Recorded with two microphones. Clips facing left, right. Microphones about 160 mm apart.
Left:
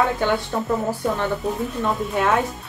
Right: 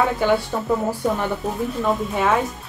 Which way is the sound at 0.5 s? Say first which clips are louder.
Left 1 dB; 5° right (ahead or behind).